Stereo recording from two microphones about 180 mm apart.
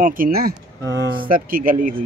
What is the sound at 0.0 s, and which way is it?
Speech, 50° right (ahead or behind).